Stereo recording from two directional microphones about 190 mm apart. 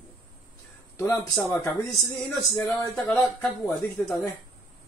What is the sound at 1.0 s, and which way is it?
Speech, 15° left (ahead or behind).